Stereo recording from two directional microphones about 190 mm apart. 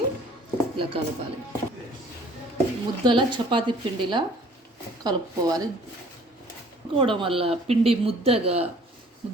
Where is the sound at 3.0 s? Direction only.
25° right (ahead or behind).